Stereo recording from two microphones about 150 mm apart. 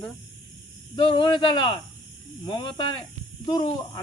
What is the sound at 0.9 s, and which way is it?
Speech, 35° left (ahead or behind).